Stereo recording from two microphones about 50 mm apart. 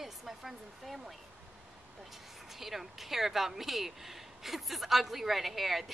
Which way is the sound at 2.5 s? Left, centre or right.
Centre.